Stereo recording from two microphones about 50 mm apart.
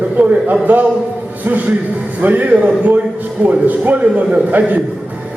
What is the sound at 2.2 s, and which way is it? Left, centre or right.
A man's voice, right.